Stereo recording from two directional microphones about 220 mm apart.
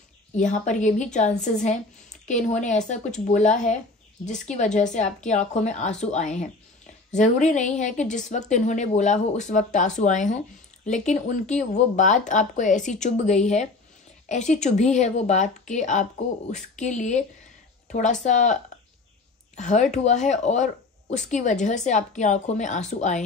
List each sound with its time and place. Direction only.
0.4 s a woman's voice: 35° left (ahead or behind)